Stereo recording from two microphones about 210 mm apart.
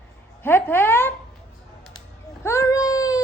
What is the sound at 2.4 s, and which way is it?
Baby cry, 15° left (ahead or behind).